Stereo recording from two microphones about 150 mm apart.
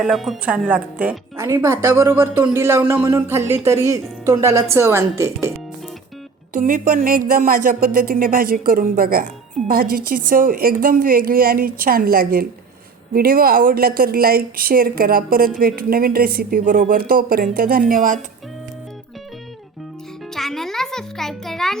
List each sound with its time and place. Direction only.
0.0 s speech: centre (ahead or behind); by 5.5 s 20° right (ahead or behind)
6.5 s speech: 70° right (ahead or behind)
20.3 s music: centre (ahead or behind)